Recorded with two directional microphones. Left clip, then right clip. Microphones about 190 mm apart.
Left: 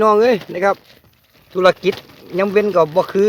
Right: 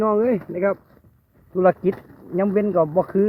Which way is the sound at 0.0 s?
20° left (ahead or behind).